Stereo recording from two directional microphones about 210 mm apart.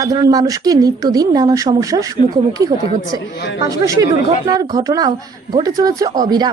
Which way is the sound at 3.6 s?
15° right (ahead or behind).